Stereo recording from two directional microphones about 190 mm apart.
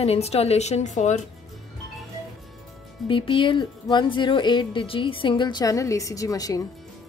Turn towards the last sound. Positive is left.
turn(degrees=20)  # may be behind; listen again after turning